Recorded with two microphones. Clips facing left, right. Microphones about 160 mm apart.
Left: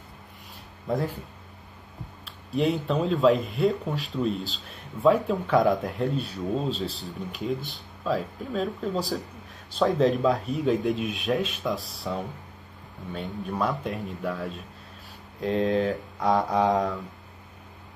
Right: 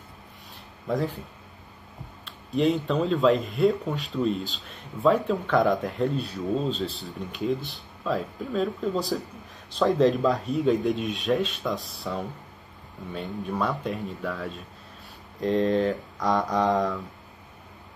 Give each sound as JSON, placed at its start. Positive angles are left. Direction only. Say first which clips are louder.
{"t": 0.8, "sound": "speech", "louder": "right 1 dB", "side_deg": 0}
{"t": 2.2, "sound": "speech", "louder": "right 2 dB", "side_deg": 0}